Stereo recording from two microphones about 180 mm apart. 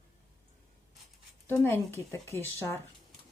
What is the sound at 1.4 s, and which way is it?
Speech, 10° left (ahead or behind).